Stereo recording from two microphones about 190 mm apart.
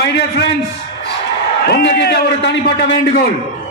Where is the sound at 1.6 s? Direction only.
55° left (ahead or behind).